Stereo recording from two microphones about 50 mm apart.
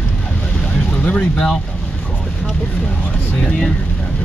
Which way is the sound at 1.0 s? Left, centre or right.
Centre.